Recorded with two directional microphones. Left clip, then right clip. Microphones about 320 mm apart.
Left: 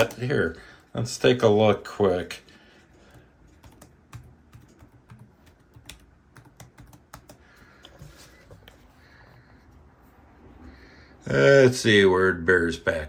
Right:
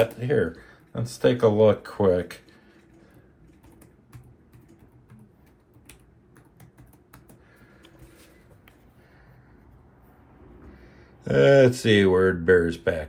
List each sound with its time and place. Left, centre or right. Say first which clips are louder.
0.0 s speech: right 1 dB; centre
5.9 s typing: left 6 dB; left
11.2 s speech: even; centre